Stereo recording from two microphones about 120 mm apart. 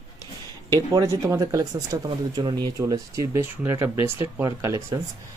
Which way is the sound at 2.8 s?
25° right (ahead or behind).